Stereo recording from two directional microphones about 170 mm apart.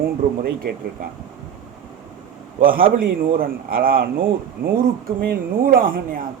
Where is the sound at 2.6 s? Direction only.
55° right (ahead or behind).